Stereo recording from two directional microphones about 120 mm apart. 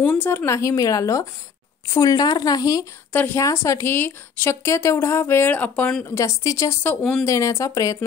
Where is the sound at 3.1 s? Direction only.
15° left (ahead or behind).